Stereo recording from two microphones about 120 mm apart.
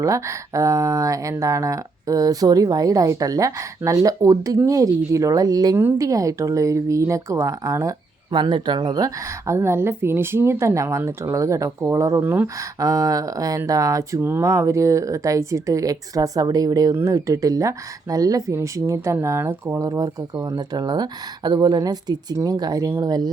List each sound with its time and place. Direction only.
0.0 s speech: 25° right (ahead or behind)
8.3 s speech: 40° right (ahead or behind); by 12.5 s 15° right (ahead or behind)
12.8 s speech: 30° right (ahead or behind)